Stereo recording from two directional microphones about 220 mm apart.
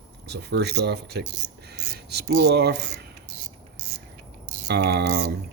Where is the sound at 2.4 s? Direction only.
50° right (ahead or behind).